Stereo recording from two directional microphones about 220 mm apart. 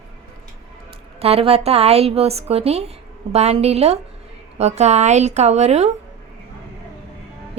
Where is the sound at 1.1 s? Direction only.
25° right (ahead or behind).